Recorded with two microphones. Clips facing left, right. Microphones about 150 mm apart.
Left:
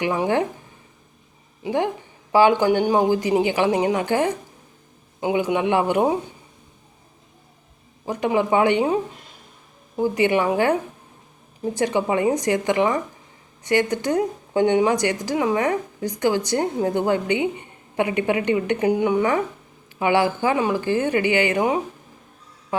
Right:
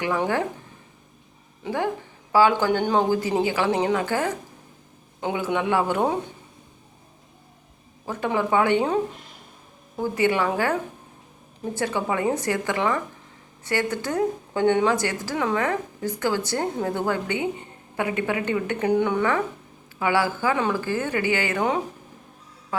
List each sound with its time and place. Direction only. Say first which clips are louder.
0.0 s a woman's voice: left 3 dB; 20° left (ahead or behind)
1.6 s a woman's voice: left 3 dB; 20° left (ahead or behind)
8.0 s a woman's voice: left 4 dB; 15° left (ahead or behind)
10.0 s a woman's voice: left 3 dB; 20° left (ahead or behind)